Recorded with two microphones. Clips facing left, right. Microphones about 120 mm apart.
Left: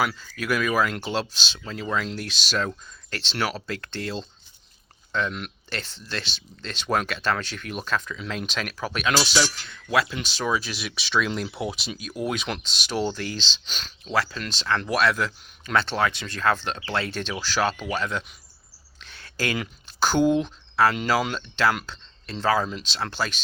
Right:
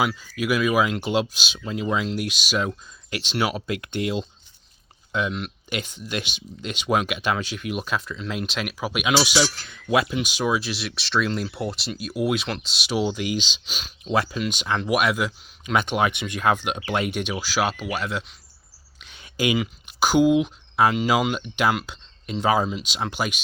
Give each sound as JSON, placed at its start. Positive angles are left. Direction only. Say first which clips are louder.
{"t": 0.0, "sound": "speech", "louder": "right 2 dB", "side_deg": -10}
{"t": 9.9, "sound": "speech", "louder": "right 2 dB", "side_deg": -20}
{"t": 10.2, "sound": "speech", "louder": "right 3 dB", "side_deg": -10}
{"t": 18.9, "sound": "a sound", "louder": "right 4 dB", "side_deg": -15}
{"t": 21.1, "sound": "speech", "louder": "right 2 dB", "side_deg": -15}